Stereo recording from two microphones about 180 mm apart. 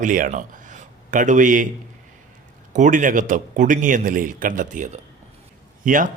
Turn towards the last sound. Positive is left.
turn(degrees=-45)  # may be behind; listen again after turning